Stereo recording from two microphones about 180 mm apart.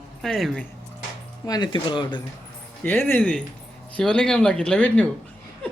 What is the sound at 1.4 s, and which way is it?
Speech, 25° left (ahead or behind).